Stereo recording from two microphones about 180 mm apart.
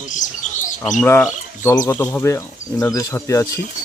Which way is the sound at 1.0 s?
10° left (ahead or behind).